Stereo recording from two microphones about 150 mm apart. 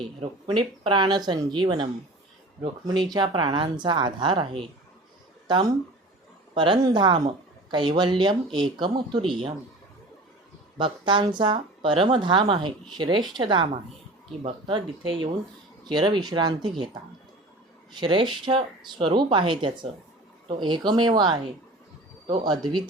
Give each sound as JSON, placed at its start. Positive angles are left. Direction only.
{"t": 0.0, "sound": "speech", "side_deg": -35}
{"t": 5.5, "sound": "speech", "side_deg": -30}
{"t": 10.8, "sound": "speech", "side_deg": -35}
{"t": 17.9, "sound": "speech", "side_deg": -35}